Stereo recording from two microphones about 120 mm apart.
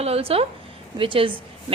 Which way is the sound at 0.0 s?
55° right (ahead or behind).